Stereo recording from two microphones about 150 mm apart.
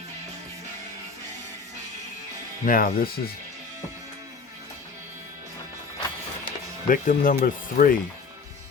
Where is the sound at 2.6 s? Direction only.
70° left (ahead or behind).